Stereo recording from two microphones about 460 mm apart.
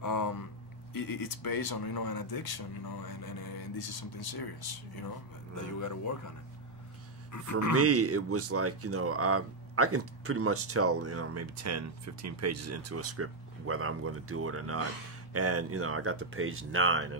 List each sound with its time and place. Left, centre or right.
0.0 s a sound: left
0.9 s speech: left
5.5 s speech: left
7.3 s speech: left
7.7 s speech: right